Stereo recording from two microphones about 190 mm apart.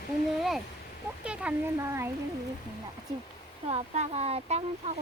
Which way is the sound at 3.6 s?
35° right (ahead or behind).